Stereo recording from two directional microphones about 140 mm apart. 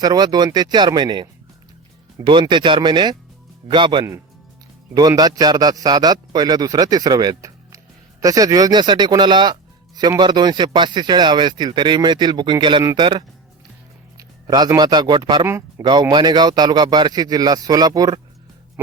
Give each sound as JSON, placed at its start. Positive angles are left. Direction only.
{"t": 0.0, "sound": "a man's voice", "side_deg": -30}